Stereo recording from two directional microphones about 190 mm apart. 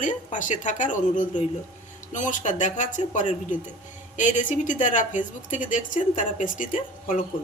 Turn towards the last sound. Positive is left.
turn(degrees=45)  # may be behind; listen again after turning